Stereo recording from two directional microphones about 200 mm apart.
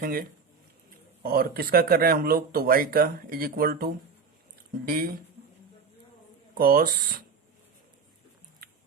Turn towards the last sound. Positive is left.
turn(degrees=-45)  # may be behind; listen again after turning